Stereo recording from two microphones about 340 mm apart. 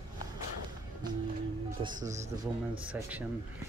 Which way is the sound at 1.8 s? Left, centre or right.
Centre.